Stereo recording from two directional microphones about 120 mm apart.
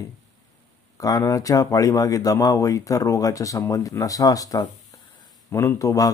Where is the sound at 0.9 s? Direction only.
30° left (ahead or behind).